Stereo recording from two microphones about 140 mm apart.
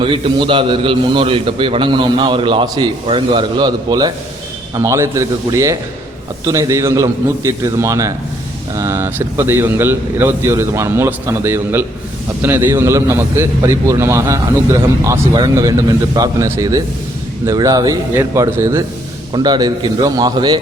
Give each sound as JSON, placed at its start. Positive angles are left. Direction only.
{"t": 0.0, "sound": "a man's voice", "side_deg": -35}
{"t": 4.7, "sound": "a man's voice", "side_deg": -20}